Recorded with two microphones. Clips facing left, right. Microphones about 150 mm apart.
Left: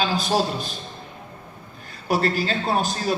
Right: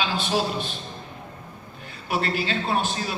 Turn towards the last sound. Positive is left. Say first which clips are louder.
# left 3 dB
turn(degrees=40)  # may be behind; listen again after turning